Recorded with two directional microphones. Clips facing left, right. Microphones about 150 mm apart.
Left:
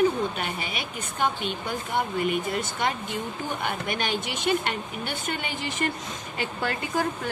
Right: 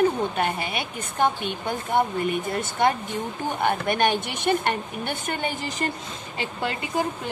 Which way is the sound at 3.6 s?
55° right (ahead or behind).